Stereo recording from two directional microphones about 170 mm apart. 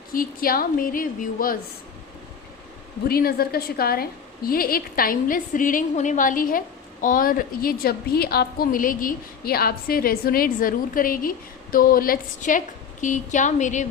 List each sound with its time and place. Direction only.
0.1 s a woman's voice: 55° left (ahead or behind)
3.1 s a woman's voice: 65° left (ahead or behind); by 13.8 s 45° left (ahead or behind)